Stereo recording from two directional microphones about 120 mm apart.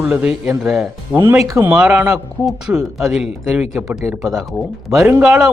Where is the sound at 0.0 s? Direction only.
10° right (ahead or behind).